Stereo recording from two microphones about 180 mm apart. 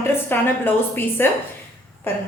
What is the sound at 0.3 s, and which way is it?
A woman's voice, 10° left (ahead or behind).